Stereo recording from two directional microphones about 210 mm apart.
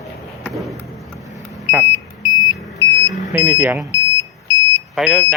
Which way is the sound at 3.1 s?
5° right (ahead or behind).